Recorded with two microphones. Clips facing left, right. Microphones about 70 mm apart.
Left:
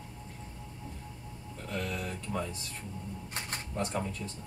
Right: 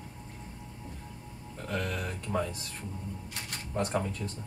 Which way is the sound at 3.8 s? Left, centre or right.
Right.